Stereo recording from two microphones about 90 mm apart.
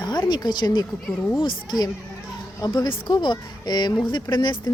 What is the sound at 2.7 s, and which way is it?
Speech, 60° left (ahead or behind).